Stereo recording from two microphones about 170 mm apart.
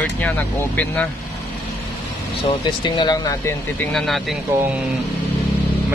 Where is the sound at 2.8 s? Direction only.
25° left (ahead or behind).